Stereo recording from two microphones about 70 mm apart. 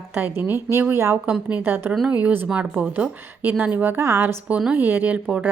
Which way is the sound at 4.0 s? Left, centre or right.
Right.